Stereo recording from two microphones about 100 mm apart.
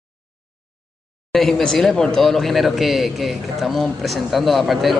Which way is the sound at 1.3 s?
5° left (ahead or behind).